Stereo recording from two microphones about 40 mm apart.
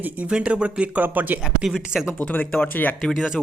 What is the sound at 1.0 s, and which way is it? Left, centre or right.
Speech, right.